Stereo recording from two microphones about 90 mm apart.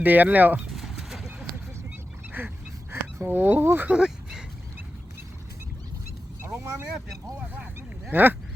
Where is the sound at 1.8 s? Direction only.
20° right (ahead or behind).